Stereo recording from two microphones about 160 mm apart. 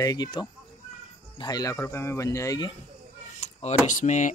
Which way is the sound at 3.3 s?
45° left (ahead or behind).